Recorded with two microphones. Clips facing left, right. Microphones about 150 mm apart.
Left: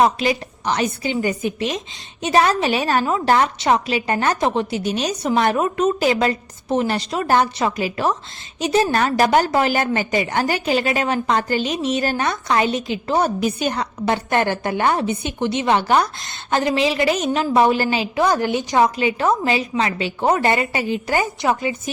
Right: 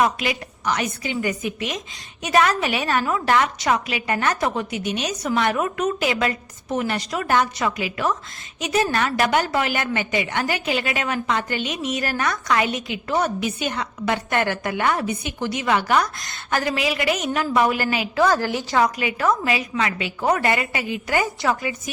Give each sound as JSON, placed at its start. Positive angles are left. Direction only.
{"t": 0.0, "sound": "a woman's voice", "side_deg": 30}
{"t": 18.2, "sound": "a woman's voice", "side_deg": 20}